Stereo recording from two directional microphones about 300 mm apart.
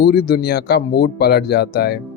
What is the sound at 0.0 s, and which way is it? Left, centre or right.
Speech, left.